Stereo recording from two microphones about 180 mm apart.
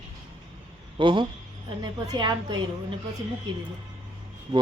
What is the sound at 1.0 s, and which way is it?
A man's voice, 25° right (ahead or behind).